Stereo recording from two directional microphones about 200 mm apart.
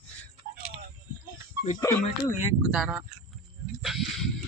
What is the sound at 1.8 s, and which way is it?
Speech, 15° left (ahead or behind).